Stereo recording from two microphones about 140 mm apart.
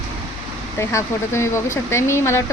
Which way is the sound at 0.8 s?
20° left (ahead or behind).